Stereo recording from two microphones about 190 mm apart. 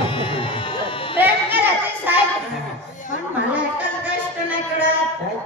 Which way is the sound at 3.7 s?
10° right (ahead or behind).